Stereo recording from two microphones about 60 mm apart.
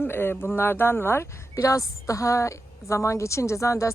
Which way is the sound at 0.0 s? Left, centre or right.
Left.